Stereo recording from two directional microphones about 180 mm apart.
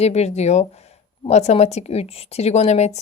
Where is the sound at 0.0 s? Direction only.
35° left (ahead or behind).